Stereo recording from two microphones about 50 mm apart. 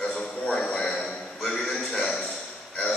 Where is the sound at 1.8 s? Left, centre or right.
Centre.